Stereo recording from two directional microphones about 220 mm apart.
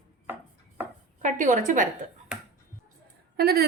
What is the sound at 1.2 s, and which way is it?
Speech, 35° right (ahead or behind).